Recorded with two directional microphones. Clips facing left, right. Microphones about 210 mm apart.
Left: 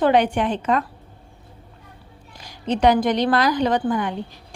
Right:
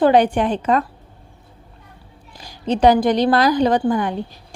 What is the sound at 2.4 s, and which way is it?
A woman's voice, 30° right (ahead or behind).